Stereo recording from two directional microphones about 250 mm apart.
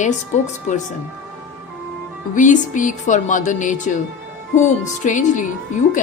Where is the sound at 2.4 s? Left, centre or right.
Left.